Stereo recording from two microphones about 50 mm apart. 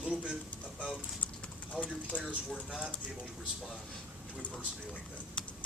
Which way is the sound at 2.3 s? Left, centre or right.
Right.